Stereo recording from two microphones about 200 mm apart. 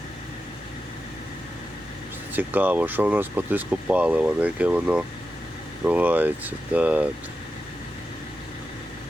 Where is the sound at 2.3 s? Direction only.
10° right (ahead or behind).